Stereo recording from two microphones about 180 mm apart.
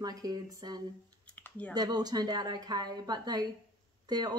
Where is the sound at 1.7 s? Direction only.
20° right (ahead or behind).